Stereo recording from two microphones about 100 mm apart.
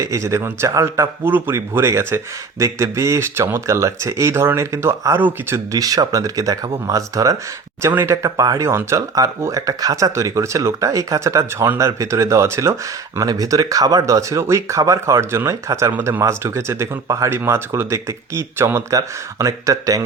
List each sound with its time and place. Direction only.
0.0 s speech: 30° right (ahead or behind)
5.7 s speech: 35° right (ahead or behind)